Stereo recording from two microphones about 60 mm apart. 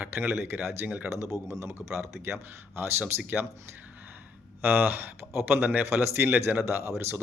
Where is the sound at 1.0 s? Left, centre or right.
Right.